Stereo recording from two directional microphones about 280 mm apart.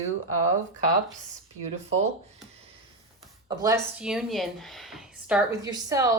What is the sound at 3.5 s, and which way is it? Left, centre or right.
Speech, centre.